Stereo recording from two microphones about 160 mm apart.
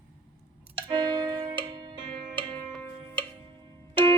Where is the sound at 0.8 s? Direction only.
30° right (ahead or behind).